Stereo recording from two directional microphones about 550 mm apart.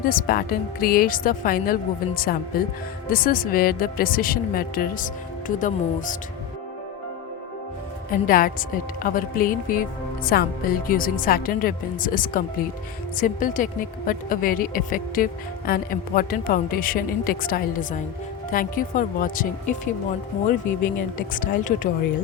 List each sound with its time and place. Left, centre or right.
0.0 s speech: centre
8.1 s speech: centre
21.2 s speech: centre